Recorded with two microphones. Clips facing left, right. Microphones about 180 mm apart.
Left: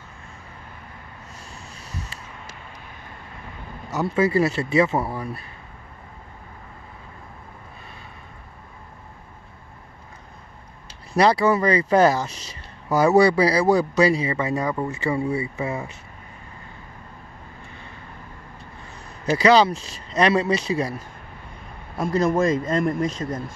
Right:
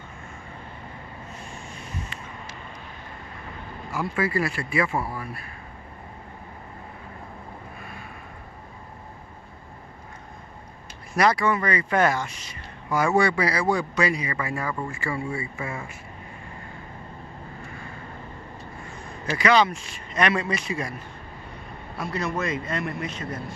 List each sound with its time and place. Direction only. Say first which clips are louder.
3.9 s speech: left 6 dB; 25° left (ahead or behind)
11.1 s speech: left 4 dB; 30° left (ahead or behind)
19.3 s speech: left 4 dB; 35° left (ahead or behind)
21.9 s a man's voice: left 8 dB; 45° left (ahead or behind)